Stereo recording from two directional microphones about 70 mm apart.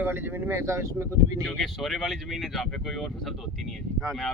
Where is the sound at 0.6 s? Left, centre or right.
Right.